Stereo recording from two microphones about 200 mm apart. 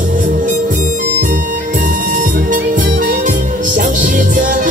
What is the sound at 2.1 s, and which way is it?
Music, 40° right (ahead or behind).